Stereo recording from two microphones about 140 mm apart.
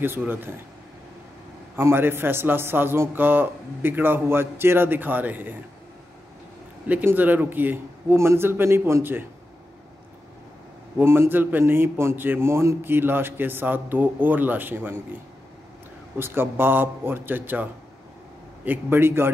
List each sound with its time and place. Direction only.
0.0 s a man's voice: 15° right (ahead or behind)
1.8 s a man's voice: 15° right (ahead or behind)
6.9 s a man's voice: 10° right (ahead or behind)
11.0 s a man's voice: 15° right (ahead or behind)
16.2 s a man's voice: 15° right (ahead or behind)
18.7 s a man's voice: 15° right (ahead or behind)